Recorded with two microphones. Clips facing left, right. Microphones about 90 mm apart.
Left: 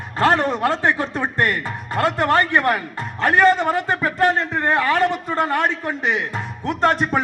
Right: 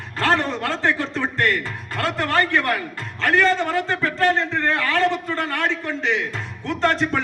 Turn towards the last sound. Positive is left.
turn(degrees=20)  # may be behind; listen again after turning